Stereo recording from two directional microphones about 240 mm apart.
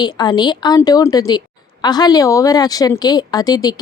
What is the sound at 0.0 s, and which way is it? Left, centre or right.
A woman's voice, centre.